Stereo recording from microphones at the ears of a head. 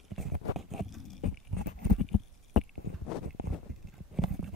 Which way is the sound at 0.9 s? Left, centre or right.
Left.